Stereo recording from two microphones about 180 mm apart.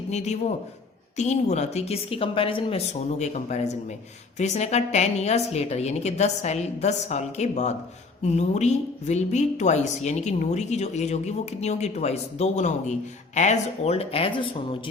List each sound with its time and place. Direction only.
0.1 s a woman's voice: 40° left (ahead or behind)